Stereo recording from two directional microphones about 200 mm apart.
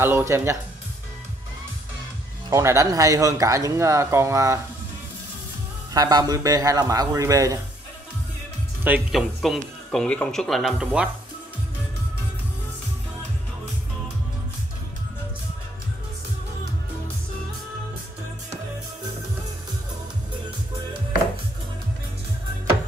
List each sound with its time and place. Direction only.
0.0 s speech: 10° right (ahead or behind)
2.5 s speech: 15° right (ahead or behind)
5.9 s speech: 20° right (ahead or behind)
8.8 s speech: 5° right (ahead or behind)